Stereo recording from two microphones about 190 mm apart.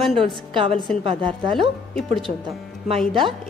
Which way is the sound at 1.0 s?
25° right (ahead or behind).